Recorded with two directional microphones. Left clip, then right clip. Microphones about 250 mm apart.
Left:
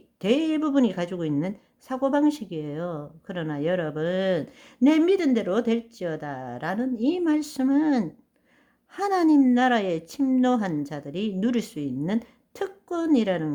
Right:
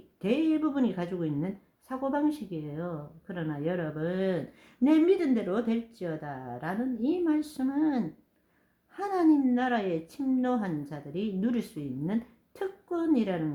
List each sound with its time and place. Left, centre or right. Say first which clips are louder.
0.2 s speech: left 4 dB; left